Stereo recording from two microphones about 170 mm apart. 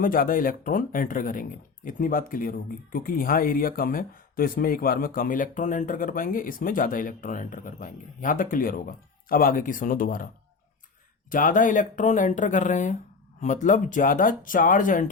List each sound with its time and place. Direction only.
0.0 s speech: 55° left (ahead or behind)
11.3 s speech: 50° left (ahead or behind)